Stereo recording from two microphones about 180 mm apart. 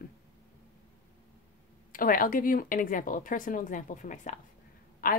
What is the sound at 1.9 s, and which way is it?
A woman's voice, 50° left (ahead or behind).